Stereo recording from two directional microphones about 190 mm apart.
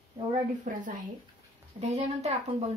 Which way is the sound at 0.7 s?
45° right (ahead or behind).